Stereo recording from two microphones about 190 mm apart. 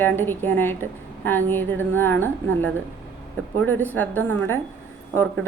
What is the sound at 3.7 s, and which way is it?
Speech, 10° left (ahead or behind).